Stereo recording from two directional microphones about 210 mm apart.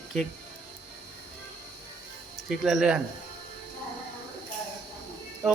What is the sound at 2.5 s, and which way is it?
Speech, centre (ahead or behind).